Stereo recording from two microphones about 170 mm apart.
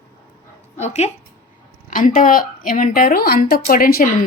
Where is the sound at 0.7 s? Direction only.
40° left (ahead or behind).